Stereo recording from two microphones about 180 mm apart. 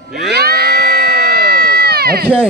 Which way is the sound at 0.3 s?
60° right (ahead or behind).